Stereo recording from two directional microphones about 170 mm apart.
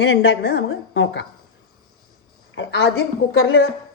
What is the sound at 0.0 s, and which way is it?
A woman's voice, 90° left.